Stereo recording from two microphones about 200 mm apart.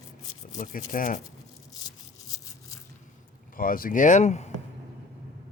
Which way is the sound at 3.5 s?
45° left (ahead or behind).